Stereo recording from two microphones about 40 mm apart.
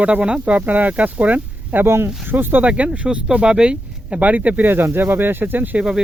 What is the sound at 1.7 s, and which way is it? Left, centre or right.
Speech, right.